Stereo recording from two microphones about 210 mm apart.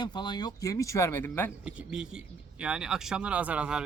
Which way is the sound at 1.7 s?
5° right (ahead or behind).